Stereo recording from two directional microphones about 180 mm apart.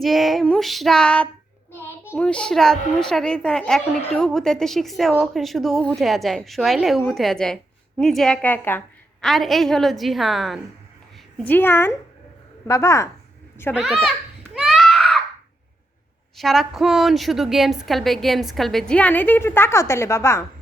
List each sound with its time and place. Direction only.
0.0 s a woman's voice: centre (ahead or behind)
9.2 s a woman's voice: centre (ahead or behind)
11.4 s a woman's voice: 10° left (ahead or behind)
13.7 s a woman's voice: centre (ahead or behind)
14.5 s a sound: centre (ahead or behind)
16.4 s a woman's voice: centre (ahead or behind)